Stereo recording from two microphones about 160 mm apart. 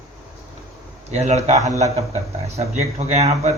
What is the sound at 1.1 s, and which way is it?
Speech, 45° right (ahead or behind).